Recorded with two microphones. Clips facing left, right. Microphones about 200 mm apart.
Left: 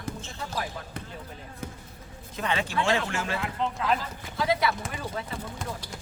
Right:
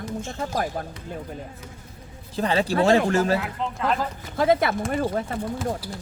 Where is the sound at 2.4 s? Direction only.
35° right (ahead or behind).